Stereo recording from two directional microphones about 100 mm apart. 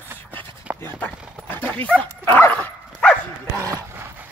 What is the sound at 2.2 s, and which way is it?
Dog, 20° left (ahead or behind).